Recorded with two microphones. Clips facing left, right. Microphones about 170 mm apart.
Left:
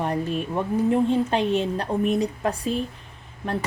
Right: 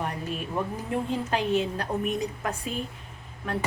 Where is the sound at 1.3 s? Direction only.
30° left (ahead or behind).